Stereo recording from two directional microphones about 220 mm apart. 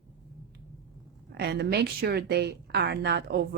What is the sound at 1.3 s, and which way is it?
Speech, 50° right (ahead or behind).